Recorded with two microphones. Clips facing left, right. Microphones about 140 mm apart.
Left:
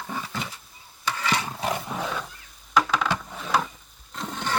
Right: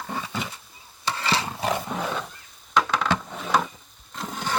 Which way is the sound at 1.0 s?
30° right (ahead or behind).